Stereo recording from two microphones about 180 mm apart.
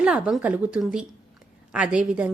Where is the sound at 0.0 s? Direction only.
5° right (ahead or behind).